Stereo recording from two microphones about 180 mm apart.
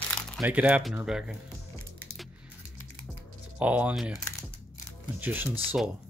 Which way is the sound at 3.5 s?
10° right (ahead or behind).